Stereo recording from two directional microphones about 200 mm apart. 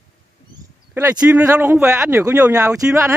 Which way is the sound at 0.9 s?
10° right (ahead or behind).